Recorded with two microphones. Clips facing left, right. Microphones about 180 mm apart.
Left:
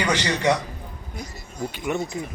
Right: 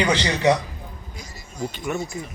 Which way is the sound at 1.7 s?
15° left (ahead or behind).